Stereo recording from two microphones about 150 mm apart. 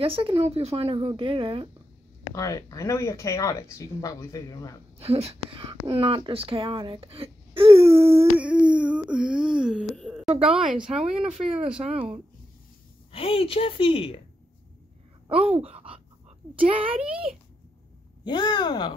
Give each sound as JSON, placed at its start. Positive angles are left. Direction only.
{"t": 0.0, "sound": "speech", "side_deg": -35}
{"t": 2.3, "sound": "speech", "side_deg": 25}
{"t": 4.9, "sound": "speech", "side_deg": -40}
{"t": 8.4, "sound": "wail", "side_deg": -5}
{"t": 10.5, "sound": "speech", "side_deg": -5}
{"t": 11.2, "sound": "speech", "side_deg": -40}
{"t": 13.1, "sound": "a woman's voice", "side_deg": 40}
{"t": 15.2, "sound": "speech", "side_deg": -35}
{"t": 18.2, "sound": "speech", "side_deg": 30}